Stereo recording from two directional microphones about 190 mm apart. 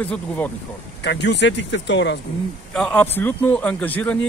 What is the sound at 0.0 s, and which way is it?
Speech, 10° left (ahead or behind).